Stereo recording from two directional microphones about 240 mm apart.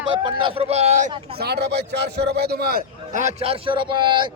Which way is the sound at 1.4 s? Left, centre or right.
Right.